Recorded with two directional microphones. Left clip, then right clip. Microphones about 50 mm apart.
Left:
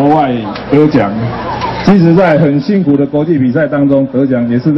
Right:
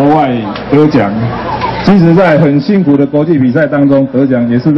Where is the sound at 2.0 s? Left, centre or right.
Centre.